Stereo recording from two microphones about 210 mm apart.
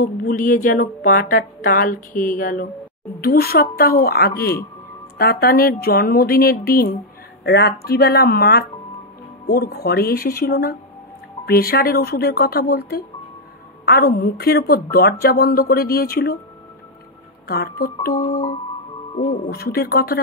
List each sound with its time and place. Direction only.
0.0 s a woman's voice: 40° left (ahead or behind)
17.5 s a woman's voice: 45° left (ahead or behind)
19.5 s a woman's voice: 45° left (ahead or behind)